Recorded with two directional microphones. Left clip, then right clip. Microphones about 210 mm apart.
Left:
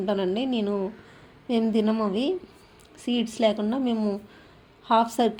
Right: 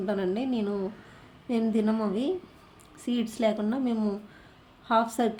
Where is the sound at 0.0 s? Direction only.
5° left (ahead or behind).